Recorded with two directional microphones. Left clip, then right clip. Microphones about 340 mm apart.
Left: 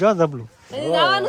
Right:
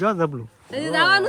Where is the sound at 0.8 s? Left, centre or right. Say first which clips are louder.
Even; right.